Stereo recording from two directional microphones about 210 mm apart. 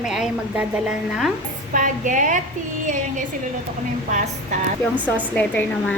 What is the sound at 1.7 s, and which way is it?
Speech, 40° right (ahead or behind).